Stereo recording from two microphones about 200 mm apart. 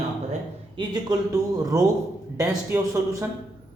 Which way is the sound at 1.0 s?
15° right (ahead or behind).